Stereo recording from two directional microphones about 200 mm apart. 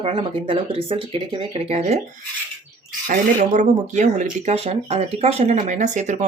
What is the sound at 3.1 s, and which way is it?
Speech, 40° right (ahead or behind).